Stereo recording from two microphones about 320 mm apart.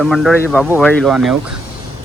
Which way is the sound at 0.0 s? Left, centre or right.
Centre.